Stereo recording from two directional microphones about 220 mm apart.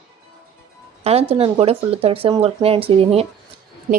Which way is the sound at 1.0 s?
25° right (ahead or behind).